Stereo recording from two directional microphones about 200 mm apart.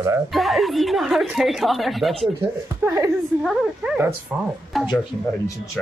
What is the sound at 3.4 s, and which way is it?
Speech, centre (ahead or behind).